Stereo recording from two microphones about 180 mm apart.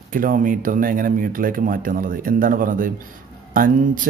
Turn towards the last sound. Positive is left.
turn(degrees=-50)  # may be behind; listen again after turning